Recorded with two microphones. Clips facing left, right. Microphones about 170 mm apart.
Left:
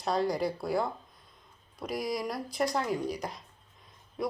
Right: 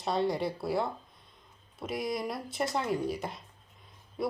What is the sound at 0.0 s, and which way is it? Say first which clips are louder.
Speech: left 1 dB; centre (ahead or behind).